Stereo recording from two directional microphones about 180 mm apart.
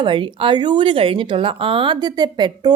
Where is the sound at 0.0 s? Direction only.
30° right (ahead or behind).